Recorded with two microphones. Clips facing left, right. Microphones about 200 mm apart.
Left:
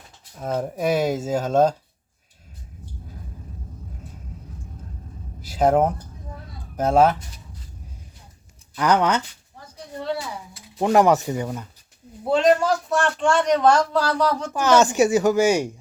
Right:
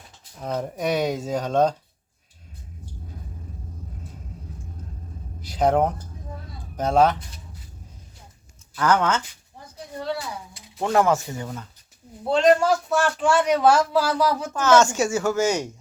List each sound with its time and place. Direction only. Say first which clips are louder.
0.3 s speech: left 2 dB; 5° left (ahead or behind)
5.4 s a sound: left 2 dB; 5° left (ahead or behind)
6.7 s speech: left 2 dB; 5° left (ahead or behind)
8.7 s speech: left 2 dB; 15° left (ahead or behind)
10.8 s speech: left 3 dB; 15° left (ahead or behind)
12.3 s speech: even; centre (ahead or behind)
14.5 s speech: even; 15° left (ahead or behind)